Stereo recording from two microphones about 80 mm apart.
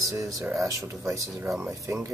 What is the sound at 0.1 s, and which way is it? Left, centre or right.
Speech, right.